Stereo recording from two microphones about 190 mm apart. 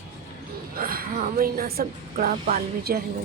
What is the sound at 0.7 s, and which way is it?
Speech, 50° right (ahead or behind).